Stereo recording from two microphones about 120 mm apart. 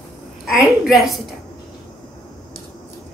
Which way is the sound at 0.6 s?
Centre (ahead or behind).